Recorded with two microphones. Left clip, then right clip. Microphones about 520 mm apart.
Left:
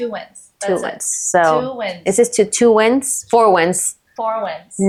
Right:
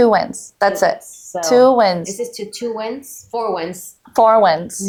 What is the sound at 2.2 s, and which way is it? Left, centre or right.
A woman's voice, left.